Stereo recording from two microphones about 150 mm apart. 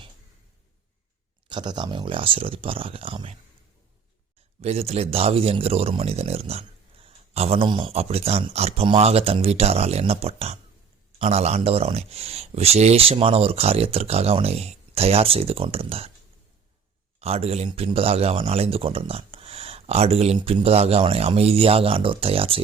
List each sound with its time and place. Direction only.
1.5 s speech: 30° right (ahead or behind)
4.6 s speech: 45° right (ahead or behind)
17.2 s speech: 40° right (ahead or behind)